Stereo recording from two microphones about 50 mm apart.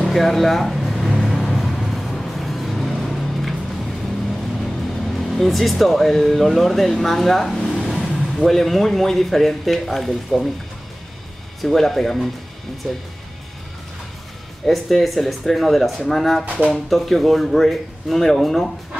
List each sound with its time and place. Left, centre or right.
0.0 s speech: centre
0.9 s vehicle: centre
4.3 s speech: centre
7.8 s vehicle: centre
8.4 s speech: centre
11.6 s speech: centre
14.7 s speech: centre
16.4 s speech: right
16.9 s speech: centre